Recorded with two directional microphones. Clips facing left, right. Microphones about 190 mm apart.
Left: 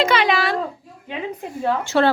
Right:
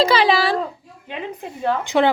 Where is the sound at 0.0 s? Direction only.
30° right (ahead or behind).